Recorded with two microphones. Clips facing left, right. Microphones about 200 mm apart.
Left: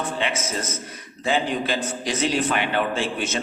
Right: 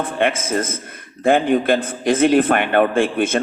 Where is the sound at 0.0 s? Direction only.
55° right (ahead or behind).